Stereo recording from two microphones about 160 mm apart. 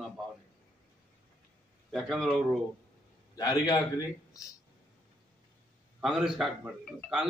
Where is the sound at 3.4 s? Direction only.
25° left (ahead or behind).